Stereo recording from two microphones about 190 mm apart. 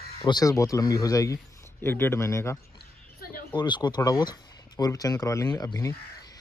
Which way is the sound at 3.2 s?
50° left (ahead or behind).